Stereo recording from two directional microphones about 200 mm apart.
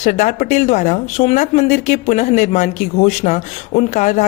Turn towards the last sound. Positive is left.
turn(degrees=35)  # may be behind; listen again after turning